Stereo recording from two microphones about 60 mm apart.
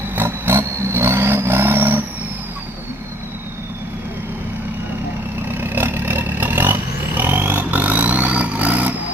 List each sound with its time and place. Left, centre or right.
0.2 s vehicle: right
5.5 s vehicle: right